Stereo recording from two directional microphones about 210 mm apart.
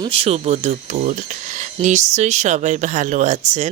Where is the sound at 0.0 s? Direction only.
25° right (ahead or behind).